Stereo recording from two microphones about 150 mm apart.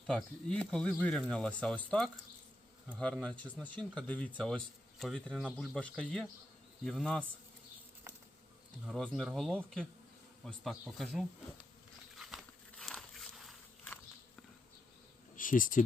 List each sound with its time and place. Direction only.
0.1 s speech: 5° left (ahead or behind)
8.9 s speech: centre (ahead or behind)
12.1 s a sound: centre (ahead or behind)
15.4 s speech: 65° left (ahead or behind)